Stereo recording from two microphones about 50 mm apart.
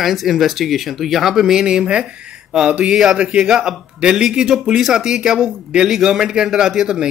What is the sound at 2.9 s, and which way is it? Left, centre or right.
Speech, centre.